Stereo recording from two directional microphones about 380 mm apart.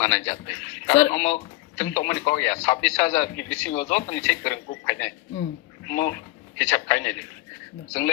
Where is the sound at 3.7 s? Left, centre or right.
Left.